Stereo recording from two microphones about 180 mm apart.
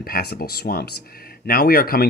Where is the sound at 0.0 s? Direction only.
60° left (ahead or behind).